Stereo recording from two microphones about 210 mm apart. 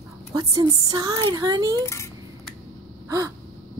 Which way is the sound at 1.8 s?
15° left (ahead or behind).